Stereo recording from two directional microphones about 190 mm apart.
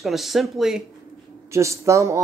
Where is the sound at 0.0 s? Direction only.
Centre (ahead or behind).